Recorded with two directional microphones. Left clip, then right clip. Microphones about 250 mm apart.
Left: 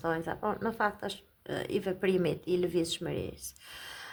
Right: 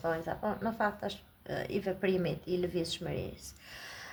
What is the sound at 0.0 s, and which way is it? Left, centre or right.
Speech, left.